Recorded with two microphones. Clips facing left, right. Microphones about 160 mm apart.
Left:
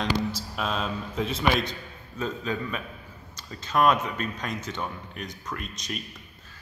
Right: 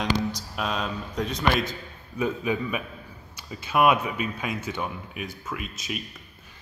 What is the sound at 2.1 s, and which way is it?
Speech, 10° right (ahead or behind).